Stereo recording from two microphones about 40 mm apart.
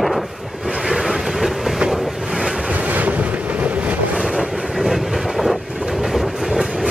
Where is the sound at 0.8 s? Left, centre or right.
Centre.